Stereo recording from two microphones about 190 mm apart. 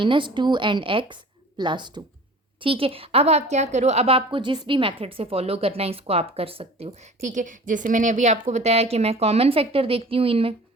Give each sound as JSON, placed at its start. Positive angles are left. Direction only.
{"t": 0.0, "sound": "a woman's voice", "side_deg": -25}